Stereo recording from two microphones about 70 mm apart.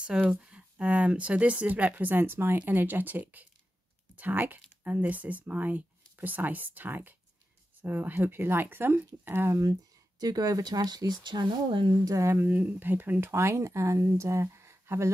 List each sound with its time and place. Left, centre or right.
0.0 s speech: centre; by 9.6 s right
9.6 s speech: right
11.9 s speech: right
12.4 s speech: right